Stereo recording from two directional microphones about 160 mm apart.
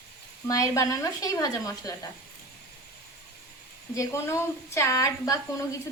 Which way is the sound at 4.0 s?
20° left (ahead or behind).